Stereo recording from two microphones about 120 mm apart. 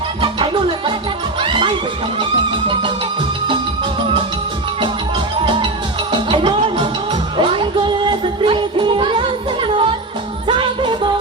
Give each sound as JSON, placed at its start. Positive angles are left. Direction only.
{"t": 0.2, "sound": "music", "side_deg": -45}
{"t": 6.1, "sound": "music", "side_deg": -45}